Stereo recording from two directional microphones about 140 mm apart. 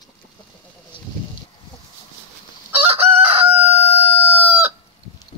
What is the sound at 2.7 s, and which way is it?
Chicken, 15° right (ahead or behind).